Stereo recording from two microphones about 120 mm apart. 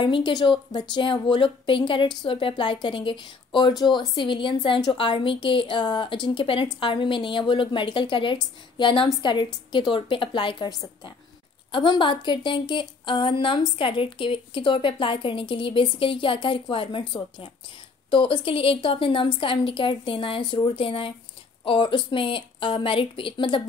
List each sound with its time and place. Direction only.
0.0 s a woman's voice: 40° left (ahead or behind)
18.1 s a woman's voice: 45° left (ahead or behind)